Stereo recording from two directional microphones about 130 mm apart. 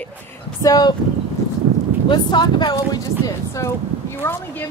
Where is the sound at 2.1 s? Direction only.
35° left (ahead or behind).